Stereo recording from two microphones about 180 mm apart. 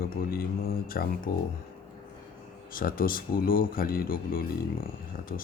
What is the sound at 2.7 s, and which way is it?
Speech, 50° left (ahead or behind).